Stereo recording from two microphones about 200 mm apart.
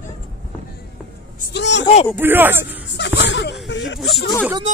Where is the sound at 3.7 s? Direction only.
65° left (ahead or behind).